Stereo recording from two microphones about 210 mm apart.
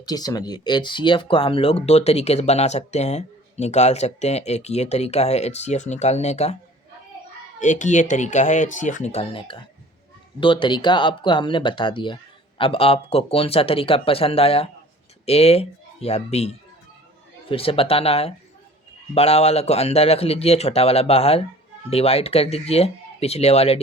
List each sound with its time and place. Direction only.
0.0 s speech: 20° left (ahead or behind)
7.6 s speech: 35° left (ahead or behind)